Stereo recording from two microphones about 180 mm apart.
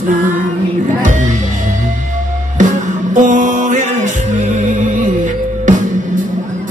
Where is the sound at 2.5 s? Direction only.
45° right (ahead or behind).